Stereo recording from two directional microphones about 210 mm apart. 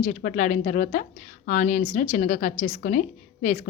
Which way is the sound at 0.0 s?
35° left (ahead or behind).